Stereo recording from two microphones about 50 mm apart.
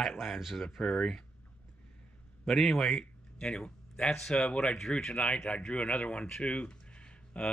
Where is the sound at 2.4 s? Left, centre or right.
Centre.